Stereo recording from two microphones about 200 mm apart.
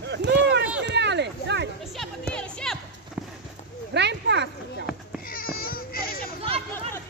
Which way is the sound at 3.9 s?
60° right (ahead or behind).